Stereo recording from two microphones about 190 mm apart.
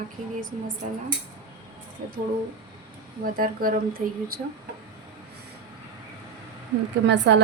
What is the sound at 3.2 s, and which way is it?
A woman's voice, 50° right (ahead or behind).